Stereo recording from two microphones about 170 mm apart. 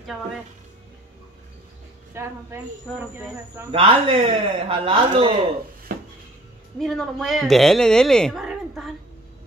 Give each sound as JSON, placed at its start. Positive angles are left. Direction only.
{"t": 2.1, "sound": "a woman's voice", "side_deg": -15}
{"t": 3.7, "sound": "a man's voice", "side_deg": -30}
{"t": 6.8, "sound": "a woman's voice", "side_deg": 0}